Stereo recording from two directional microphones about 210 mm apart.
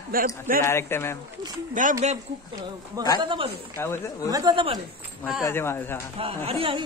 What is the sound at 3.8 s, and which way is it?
Speech, 10° left (ahead or behind).